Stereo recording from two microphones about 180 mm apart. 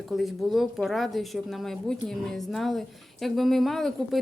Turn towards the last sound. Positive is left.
turn(degrees=0)  # may be behind; listen again after turning